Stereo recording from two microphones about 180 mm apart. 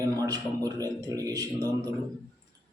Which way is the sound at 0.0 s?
20° right (ahead or behind).